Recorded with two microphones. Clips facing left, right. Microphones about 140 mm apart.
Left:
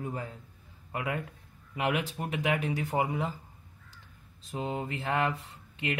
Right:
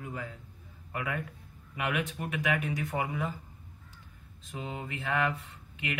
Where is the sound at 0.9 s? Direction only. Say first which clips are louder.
Left 2 dB; 25° left (ahead or behind).